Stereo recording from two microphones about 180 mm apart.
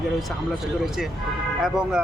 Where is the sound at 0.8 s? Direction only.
Centre (ahead or behind).